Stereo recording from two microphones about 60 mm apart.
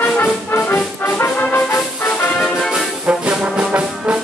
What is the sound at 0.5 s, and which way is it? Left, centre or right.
Brass instrument, left.